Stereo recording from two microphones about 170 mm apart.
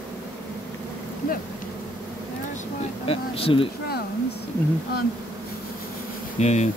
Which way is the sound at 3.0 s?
35° left (ahead or behind).